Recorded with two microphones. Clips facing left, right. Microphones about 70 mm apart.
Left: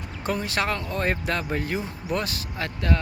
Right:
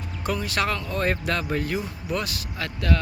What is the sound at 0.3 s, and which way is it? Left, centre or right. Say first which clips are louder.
Speech: even; left.